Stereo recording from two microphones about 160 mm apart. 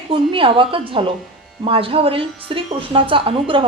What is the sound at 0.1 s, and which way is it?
A woman's voice, 30° right (ahead or behind).